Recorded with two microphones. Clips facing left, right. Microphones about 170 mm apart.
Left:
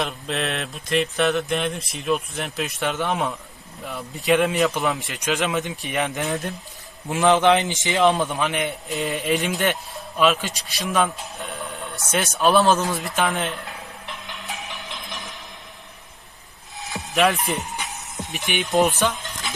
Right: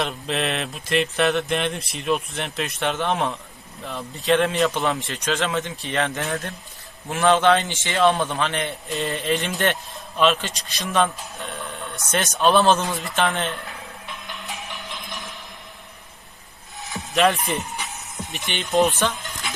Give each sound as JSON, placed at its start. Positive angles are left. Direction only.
{"t": 0.0, "sound": "mantra", "side_deg": 0}
{"t": 3.8, "sound": "speech", "side_deg": 10}
{"t": 5.0, "sound": "speech", "side_deg": 15}
{"t": 9.0, "sound": "mantra", "side_deg": 15}
{"t": 17.1, "sound": "mantra", "side_deg": 0}
{"t": 17.6, "sound": "music", "side_deg": 20}
{"t": 18.3, "sound": "speech", "side_deg": 15}